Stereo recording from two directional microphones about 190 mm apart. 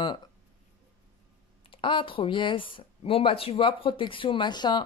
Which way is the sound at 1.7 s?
25° left (ahead or behind).